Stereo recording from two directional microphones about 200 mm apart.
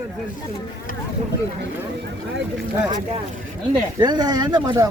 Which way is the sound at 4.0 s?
20° right (ahead or behind).